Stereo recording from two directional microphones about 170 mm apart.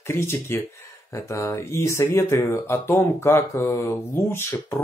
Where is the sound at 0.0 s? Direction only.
15° left (ahead or behind).